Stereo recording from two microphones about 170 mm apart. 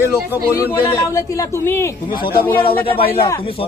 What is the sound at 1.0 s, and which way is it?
Speech, 15° left (ahead or behind).